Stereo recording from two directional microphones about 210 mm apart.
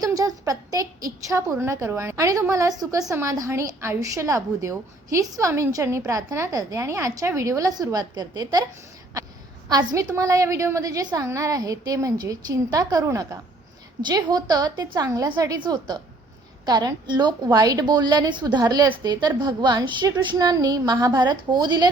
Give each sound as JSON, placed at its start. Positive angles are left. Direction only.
{"t": 0.0, "sound": "a woman's voice", "side_deg": -15}
{"t": 9.6, "sound": "a woman's voice", "side_deg": -15}